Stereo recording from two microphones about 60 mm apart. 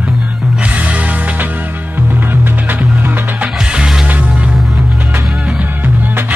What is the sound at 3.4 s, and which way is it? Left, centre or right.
Music, centre.